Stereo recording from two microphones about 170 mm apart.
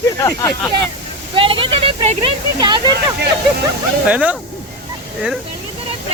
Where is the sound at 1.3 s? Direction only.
30° right (ahead or behind).